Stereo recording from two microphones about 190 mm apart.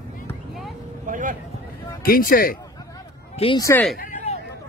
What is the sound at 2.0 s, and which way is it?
Speech, 50° left (ahead or behind).